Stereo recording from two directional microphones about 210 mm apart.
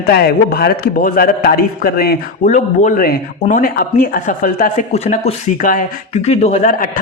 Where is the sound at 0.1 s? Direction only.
50° left (ahead or behind).